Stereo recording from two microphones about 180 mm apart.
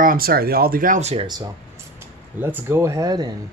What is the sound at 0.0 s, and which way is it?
Speech, 55° right (ahead or behind).